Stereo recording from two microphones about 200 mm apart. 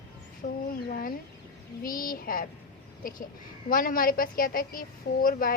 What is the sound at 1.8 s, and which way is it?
A woman's voice, 45° left (ahead or behind).